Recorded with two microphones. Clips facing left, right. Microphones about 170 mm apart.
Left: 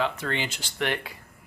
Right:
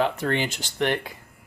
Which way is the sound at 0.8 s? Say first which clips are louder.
Right 4 dB; 20° right (ahead or behind).